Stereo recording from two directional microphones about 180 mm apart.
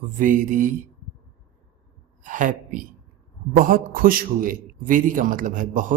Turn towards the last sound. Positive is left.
turn(degrees=-45)  # may be behind; listen again after turning